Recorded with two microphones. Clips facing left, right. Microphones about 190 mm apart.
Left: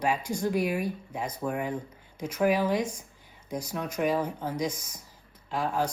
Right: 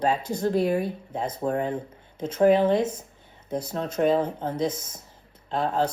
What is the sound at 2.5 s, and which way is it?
Speech, 25° right (ahead or behind).